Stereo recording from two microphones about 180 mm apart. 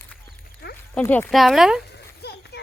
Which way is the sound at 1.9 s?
65° left (ahead or behind).